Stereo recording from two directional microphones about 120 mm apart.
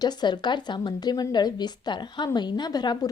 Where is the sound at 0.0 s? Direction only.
35° left (ahead or behind).